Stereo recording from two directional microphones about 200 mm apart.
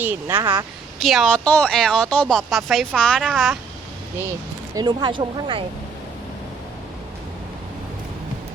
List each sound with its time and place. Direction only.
0.0 s speech: 10° right (ahead or behind)
4.7 s speech: 20° right (ahead or behind)